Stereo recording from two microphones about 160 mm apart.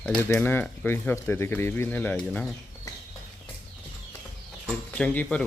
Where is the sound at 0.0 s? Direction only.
10° left (ahead or behind).